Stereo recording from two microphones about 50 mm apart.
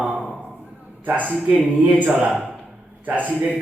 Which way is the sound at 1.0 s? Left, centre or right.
Right.